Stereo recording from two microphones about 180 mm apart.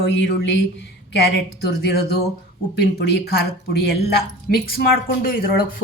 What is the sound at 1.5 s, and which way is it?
A woman's voice, 65° left (ahead or behind).